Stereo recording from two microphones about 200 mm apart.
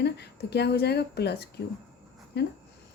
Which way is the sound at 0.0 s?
55° left (ahead or behind).